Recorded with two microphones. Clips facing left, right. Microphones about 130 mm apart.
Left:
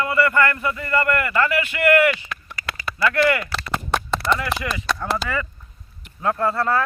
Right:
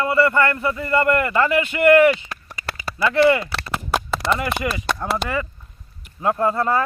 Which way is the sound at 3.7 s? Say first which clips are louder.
Even; 5° right (ahead or behind).